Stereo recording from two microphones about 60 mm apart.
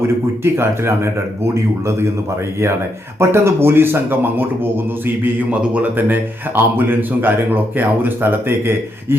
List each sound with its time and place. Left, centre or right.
0.4 s speech: right
3.2 s speech: right
5.5 s speech: right